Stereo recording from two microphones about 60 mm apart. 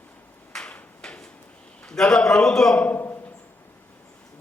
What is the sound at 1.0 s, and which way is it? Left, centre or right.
Drawer open or close, centre.